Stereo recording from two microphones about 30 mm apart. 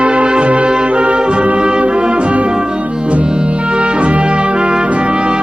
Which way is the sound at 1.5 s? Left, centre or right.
Right.